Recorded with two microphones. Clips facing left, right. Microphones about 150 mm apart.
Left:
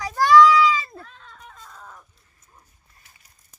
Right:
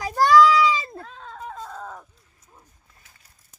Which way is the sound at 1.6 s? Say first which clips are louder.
Right 8 dB; 80° right.